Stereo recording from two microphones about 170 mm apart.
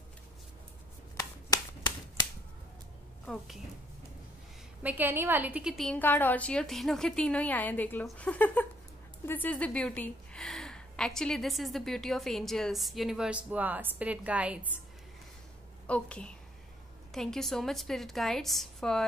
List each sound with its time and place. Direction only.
1.1 s shuffling cards: 20° left (ahead or behind)
4.8 s a woman's voice: 10° right (ahead or behind)
15.9 s a woman's voice: 5° left (ahead or behind)